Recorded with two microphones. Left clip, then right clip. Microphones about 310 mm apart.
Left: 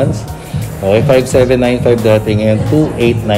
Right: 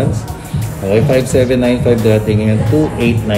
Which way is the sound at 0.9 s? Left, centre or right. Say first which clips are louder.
Left 3 dB; centre.